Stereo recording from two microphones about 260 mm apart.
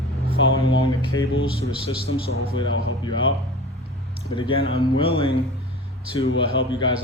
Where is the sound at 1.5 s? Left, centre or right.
Left.